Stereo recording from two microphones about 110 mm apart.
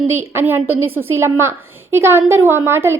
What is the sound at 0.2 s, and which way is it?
Speech, 20° right (ahead or behind).